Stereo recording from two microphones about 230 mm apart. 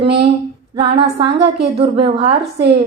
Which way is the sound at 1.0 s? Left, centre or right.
Right.